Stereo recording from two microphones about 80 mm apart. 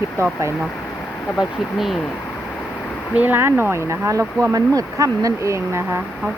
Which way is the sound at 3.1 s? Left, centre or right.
Right.